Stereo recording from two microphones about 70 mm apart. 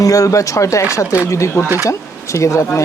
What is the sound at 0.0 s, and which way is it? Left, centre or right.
Speech, left.